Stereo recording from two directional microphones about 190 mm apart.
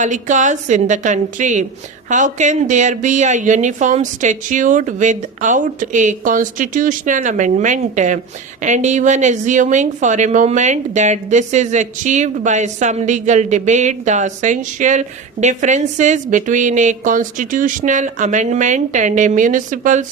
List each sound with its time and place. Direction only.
0.0 s speech: 40° right (ahead or behind)